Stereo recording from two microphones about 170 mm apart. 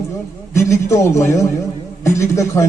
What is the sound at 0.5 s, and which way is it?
A man's voice, 15° left (ahead or behind).